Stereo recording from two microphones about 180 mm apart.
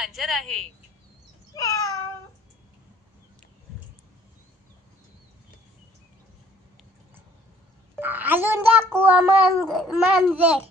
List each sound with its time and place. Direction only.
0.0 s a child's voice: centre (ahead or behind)
1.6 s a sound: 20° left (ahead or behind)
8.0 s a child's voice: 10° right (ahead or behind)